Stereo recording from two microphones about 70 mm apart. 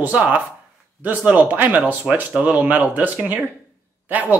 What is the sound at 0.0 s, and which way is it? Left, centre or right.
Speech, right.